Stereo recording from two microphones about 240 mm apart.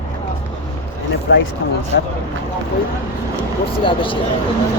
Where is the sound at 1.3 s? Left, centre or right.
Left.